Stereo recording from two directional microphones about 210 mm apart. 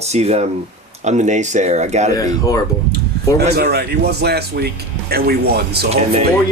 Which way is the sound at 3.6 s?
50° right (ahead or behind).